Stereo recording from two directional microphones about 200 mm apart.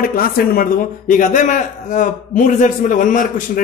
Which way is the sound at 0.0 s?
45° left (ahead or behind).